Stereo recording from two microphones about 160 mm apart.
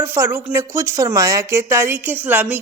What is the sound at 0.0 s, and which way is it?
A woman's voice, 15° right (ahead or behind).